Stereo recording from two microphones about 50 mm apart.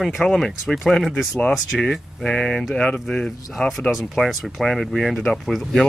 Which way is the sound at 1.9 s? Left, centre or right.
Centre.